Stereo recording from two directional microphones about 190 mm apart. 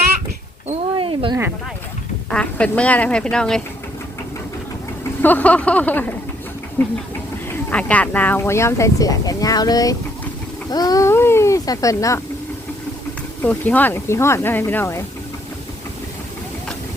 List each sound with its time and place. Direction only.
0.9 s a sound: 25° right (ahead or behind)
2.3 s speech: 5° left (ahead or behind)
5.2 s speech: 10° left (ahead or behind)
13.4 s speech: 10° left (ahead or behind)